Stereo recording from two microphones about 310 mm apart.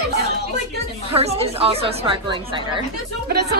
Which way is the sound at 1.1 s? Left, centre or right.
Centre.